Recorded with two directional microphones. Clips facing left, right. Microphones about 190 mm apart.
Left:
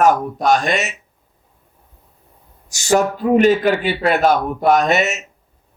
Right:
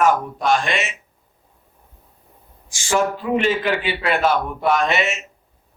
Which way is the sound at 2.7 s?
40° left (ahead or behind).